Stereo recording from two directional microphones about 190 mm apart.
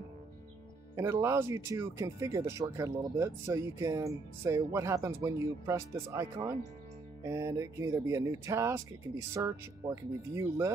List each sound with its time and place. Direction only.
0.9 s speech: 15° right (ahead or behind)